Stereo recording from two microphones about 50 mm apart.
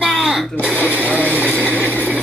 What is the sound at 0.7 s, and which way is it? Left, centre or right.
Speech, left.